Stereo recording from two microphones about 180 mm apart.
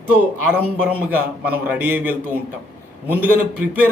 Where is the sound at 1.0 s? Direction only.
10° right (ahead or behind).